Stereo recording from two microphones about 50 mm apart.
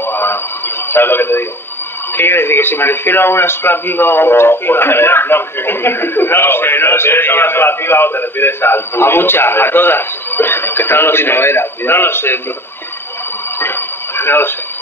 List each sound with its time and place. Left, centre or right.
0.0 s radio: left
2.1 s a man's voice: left
13.6 s radio: left